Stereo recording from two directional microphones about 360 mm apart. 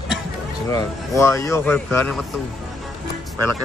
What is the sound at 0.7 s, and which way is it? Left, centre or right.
Speech, centre.